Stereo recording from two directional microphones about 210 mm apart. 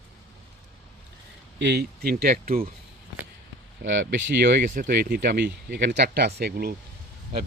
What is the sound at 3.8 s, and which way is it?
Speech, 50° right (ahead or behind).